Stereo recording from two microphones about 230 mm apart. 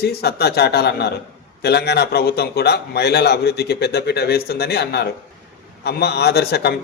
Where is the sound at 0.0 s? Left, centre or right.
Left.